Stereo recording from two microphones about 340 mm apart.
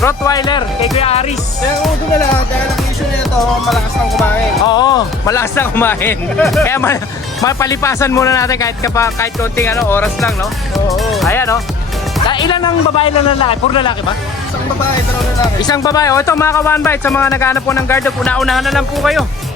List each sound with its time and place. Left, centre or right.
0.0 s speech: centre
3.7 s speech: centre
4.6 s speech: centre
15.6 s speech: centre